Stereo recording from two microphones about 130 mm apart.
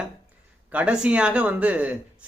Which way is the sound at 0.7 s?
10° right (ahead or behind).